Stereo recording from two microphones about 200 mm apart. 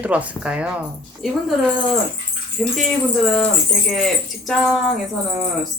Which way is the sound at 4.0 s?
Centre (ahead or behind).